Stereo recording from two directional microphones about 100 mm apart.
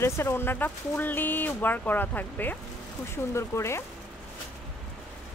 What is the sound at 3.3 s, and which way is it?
Speech, 30° left (ahead or behind).